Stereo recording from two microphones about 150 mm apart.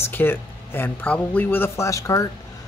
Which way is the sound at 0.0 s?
15° left (ahead or behind).